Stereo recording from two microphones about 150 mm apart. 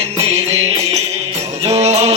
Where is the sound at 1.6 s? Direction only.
45° right (ahead or behind).